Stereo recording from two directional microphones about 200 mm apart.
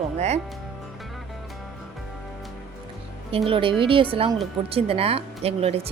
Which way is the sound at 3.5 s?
25° right (ahead or behind).